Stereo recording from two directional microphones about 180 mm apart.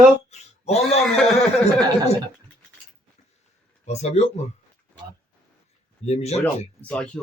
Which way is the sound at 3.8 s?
35° left (ahead or behind).